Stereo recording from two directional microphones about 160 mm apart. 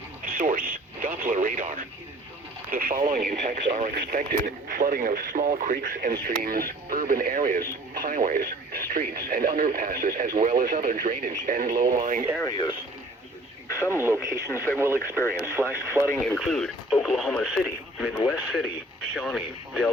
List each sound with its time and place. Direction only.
0.3 s radio: 60° right (ahead or behind)
2.6 s speech: 65° right (ahead or behind)
3.9 s speech: 80° right; by 12.2 s 60° right (ahead or behind)
12.4 s speech: 25° left (ahead or behind)
13.7 s radio: 15° left (ahead or behind)
13.9 s speech: 15° right (ahead or behind)
14.3 s speech: 20° left (ahead or behind)
15.5 s speech: 15° right (ahead or behind)
16.4 s speech: centre (ahead or behind)